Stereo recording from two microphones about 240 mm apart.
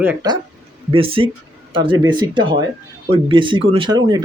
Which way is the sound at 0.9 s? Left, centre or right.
Right.